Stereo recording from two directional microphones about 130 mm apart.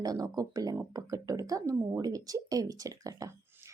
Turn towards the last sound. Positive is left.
turn(degrees=-25)  # may be behind; listen again after turning